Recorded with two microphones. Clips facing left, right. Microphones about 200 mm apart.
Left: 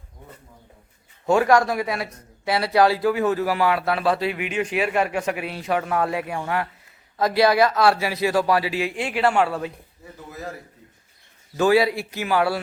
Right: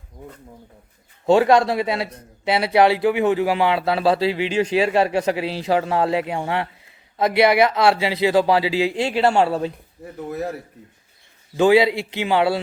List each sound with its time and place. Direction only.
1.3 s a man's voice: 25° right (ahead or behind)
11.5 s a man's voice: 25° right (ahead or behind)